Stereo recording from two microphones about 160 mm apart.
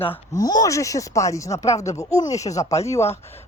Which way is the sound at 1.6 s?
45° left (ahead or behind).